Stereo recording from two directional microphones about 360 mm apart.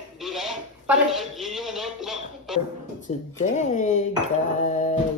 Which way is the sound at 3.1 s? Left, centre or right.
Centre.